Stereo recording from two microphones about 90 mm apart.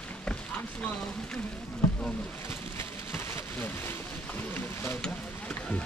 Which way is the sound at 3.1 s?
20° left (ahead or behind).